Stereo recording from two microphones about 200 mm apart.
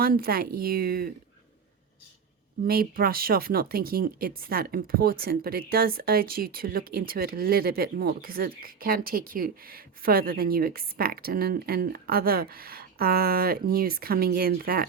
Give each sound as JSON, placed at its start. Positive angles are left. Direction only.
{"t": 0.0, "sound": "speech", "side_deg": -50}
{"t": 2.6, "sound": "speech", "side_deg": -45}